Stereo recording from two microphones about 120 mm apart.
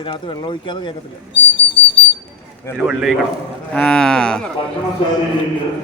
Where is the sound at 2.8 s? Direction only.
Centre (ahead or behind).